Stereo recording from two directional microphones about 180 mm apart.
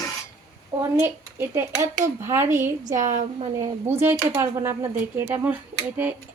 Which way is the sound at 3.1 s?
45° right (ahead or behind).